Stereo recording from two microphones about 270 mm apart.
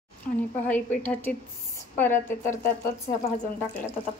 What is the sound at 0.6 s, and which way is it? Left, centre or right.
Speech, centre.